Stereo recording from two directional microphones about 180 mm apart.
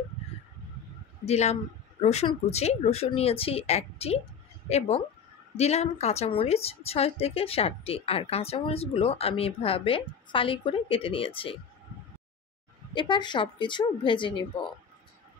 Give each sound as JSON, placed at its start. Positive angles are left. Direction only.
{"t": 1.2, "sound": "a woman's voice", "side_deg": 35}
{"t": 12.9, "sound": "a woman's voice", "side_deg": 25}